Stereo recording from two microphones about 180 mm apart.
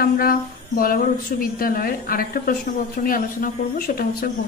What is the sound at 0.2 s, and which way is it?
A woman's voice, 55° left (ahead or behind).